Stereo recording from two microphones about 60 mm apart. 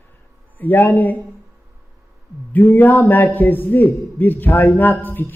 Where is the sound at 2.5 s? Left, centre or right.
Left.